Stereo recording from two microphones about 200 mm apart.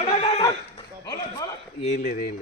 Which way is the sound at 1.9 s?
40° left (ahead or behind).